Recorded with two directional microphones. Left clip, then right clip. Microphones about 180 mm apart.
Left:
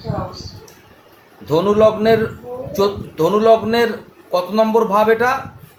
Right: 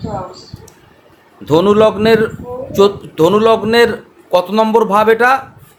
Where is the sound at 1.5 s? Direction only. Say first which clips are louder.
Right 3 dB; 50° right (ahead or behind).